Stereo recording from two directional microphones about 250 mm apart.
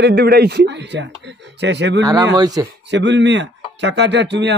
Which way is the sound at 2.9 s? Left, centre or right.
Right.